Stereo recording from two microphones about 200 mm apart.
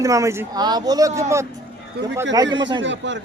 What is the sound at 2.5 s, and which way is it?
Speech, 65° right (ahead or behind).